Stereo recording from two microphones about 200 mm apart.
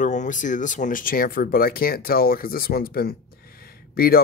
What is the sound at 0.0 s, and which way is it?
Speech, 40° left (ahead or behind).